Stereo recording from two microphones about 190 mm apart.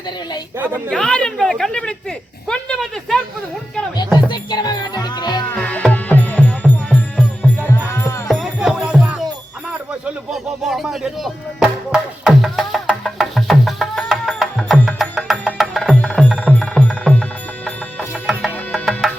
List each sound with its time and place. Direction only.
0.9 s speech: 5° left (ahead or behind)
4.3 s speech: 20° left (ahead or behind)
5.5 s music: 5° left (ahead or behind)
8.3 s music: centre (ahead or behind)
10.3 s music: centre (ahead or behind)